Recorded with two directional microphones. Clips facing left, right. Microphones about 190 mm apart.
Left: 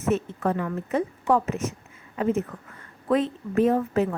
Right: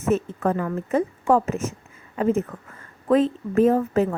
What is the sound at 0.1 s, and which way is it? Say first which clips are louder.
Speech: right 3 dB; 45° right (ahead or behind).